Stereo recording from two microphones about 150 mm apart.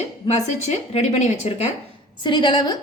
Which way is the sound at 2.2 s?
30° left (ahead or behind).